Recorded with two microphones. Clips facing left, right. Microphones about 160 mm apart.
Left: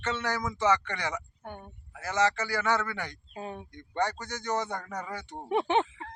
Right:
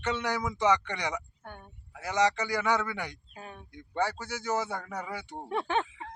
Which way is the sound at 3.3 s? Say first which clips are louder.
Left 11 dB; 25° left (ahead or behind).